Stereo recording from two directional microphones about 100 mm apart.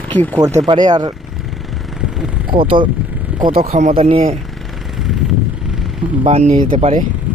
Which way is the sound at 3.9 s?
70° right (ahead or behind).